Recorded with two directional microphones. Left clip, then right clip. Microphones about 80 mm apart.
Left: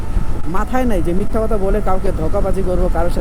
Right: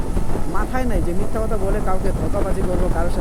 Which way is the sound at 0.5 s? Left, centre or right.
Left.